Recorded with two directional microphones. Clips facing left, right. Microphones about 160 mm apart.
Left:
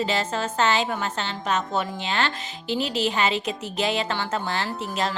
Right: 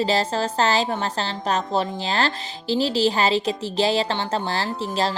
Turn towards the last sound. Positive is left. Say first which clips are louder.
# right 3 dB
turn(degrees=-30)  # may be behind; listen again after turning